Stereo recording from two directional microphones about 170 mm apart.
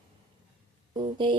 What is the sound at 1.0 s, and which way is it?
Speech, 30° right (ahead or behind).